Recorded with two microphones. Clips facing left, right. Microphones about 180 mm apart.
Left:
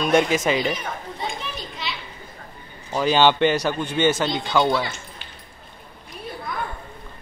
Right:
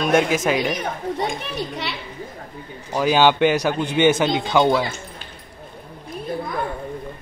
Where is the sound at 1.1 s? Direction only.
70° right (ahead or behind).